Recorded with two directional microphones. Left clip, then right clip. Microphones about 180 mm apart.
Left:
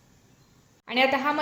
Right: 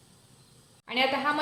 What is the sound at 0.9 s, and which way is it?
Speech, 45° left (ahead or behind).